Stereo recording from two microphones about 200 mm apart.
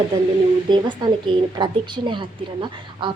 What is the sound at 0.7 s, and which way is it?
Speech, 25° right (ahead or behind).